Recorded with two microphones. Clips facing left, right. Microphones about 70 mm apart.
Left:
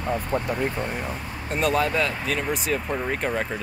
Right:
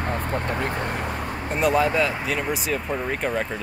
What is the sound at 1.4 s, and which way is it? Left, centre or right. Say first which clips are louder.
Speech: right 2 dB; centre.